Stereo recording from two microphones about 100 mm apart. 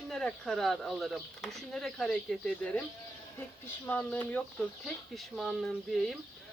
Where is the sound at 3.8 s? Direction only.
20° left (ahead or behind).